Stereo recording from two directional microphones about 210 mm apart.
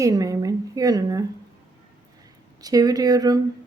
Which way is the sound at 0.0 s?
15° right (ahead or behind).